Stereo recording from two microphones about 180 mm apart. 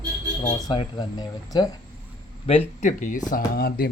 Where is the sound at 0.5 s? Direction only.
25° left (ahead or behind).